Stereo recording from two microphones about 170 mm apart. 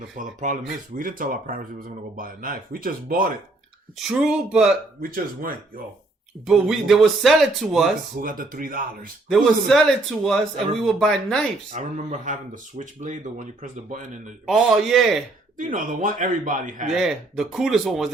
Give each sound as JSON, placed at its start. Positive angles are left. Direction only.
{"t": 0.2, "sound": "speech", "side_deg": -50}
{"t": 3.9, "sound": "speech", "side_deg": -5}
{"t": 4.9, "sound": "speech", "side_deg": -60}
{"t": 6.4, "sound": "speech", "side_deg": -5}
{"t": 8.2, "sound": "speech", "side_deg": -55}
{"t": 9.3, "sound": "speech", "side_deg": 0}
{"t": 11.7, "sound": "speech", "side_deg": -45}
{"t": 14.4, "sound": "speech", "side_deg": 0}
{"t": 15.5, "sound": "speech", "side_deg": -50}
{"t": 16.9, "sound": "speech", "side_deg": 0}